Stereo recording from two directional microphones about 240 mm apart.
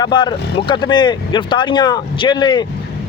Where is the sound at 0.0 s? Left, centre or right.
Centre.